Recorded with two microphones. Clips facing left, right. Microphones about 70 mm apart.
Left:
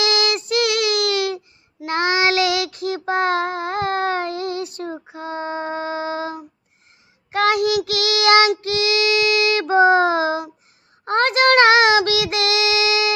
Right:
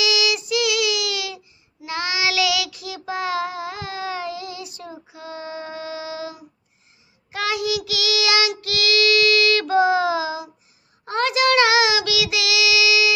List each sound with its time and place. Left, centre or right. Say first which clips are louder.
0.0 s child singing: left 2 dB; left
8.6 s child singing: left 1 dB; left